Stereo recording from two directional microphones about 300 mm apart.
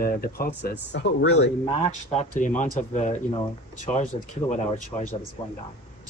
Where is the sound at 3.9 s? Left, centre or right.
Left.